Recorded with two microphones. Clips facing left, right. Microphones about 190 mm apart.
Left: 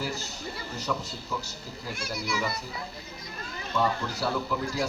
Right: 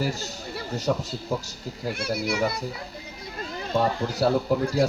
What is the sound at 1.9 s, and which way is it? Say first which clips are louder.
Speech: right 6 dB; 60° right (ahead or behind).